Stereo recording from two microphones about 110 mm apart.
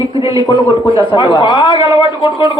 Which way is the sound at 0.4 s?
35° left (ahead or behind).